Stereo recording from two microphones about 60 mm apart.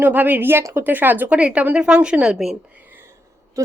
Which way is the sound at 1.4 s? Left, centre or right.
Centre.